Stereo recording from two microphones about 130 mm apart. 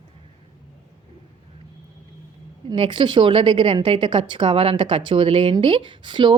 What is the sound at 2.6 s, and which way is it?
Speech, 40° right (ahead or behind).